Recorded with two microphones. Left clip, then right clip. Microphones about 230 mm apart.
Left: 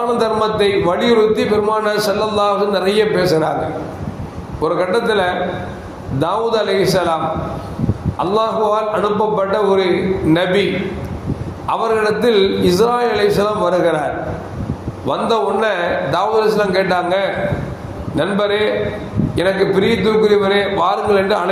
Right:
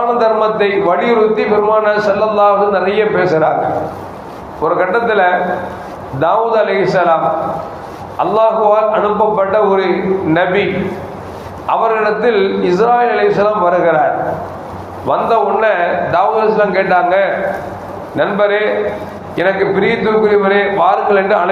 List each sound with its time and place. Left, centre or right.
0.2 s a man's voice: left
4.6 s a man's voice: left
8.2 s a man's voice: left
11.7 s a man's voice: left
15.0 s a man's voice: left